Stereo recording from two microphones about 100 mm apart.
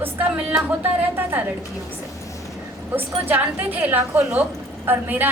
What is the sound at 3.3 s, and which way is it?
A woman's voice, 15° right (ahead or behind).